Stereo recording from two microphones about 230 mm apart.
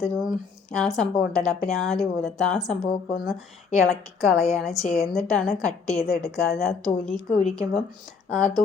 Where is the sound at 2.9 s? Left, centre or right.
Left.